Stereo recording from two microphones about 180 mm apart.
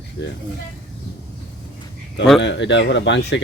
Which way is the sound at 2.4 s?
85° left.